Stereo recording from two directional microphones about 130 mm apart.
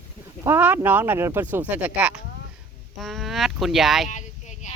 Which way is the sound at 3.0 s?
Centre (ahead or behind).